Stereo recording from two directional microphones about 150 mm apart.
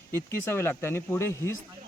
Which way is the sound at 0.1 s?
15° left (ahead or behind).